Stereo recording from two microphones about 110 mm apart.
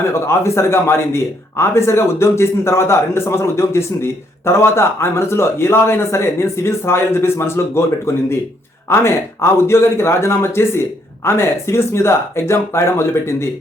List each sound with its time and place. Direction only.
0.1 s a man's voice: 25° left (ahead or behind)